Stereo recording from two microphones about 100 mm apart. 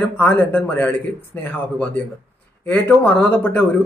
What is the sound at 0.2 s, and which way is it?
Speech, 15° left (ahead or behind).